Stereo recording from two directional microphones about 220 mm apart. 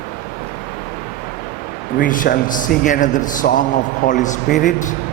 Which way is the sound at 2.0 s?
40° left (ahead or behind).